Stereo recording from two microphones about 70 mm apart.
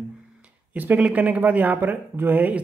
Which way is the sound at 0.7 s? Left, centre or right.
Right.